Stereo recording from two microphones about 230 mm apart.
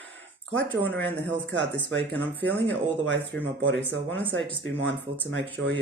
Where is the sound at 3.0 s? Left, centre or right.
Right.